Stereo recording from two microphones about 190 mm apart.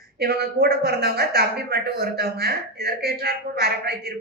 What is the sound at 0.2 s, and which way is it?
A woman's voice, 55° right (ahead or behind).